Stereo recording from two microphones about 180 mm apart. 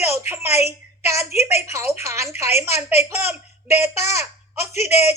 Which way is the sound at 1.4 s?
15° right (ahead or behind).